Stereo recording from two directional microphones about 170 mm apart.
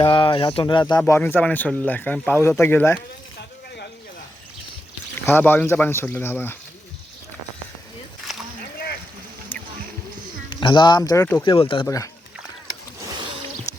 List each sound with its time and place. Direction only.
0.0 s speech: 30° left (ahead or behind); by 3.0 s 10° left (ahead or behind)
5.2 s speech: 10° left (ahead or behind)
8.3 s a sound: centre (ahead or behind)
10.5 s speech: 30° left (ahead or behind)